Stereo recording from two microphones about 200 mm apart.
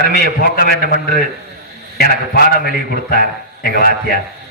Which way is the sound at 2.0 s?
50° left (ahead or behind).